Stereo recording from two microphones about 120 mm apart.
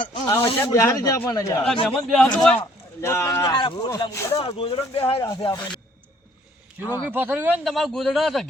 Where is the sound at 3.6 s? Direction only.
35° left (ahead or behind).